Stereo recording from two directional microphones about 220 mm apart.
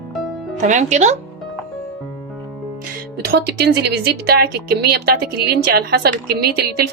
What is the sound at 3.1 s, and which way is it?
Speech, 45° right (ahead or behind).